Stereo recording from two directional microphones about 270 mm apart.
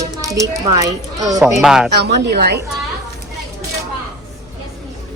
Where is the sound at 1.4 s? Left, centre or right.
Centre.